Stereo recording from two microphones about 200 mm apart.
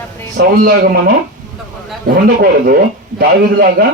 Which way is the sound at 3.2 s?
50° right (ahead or behind).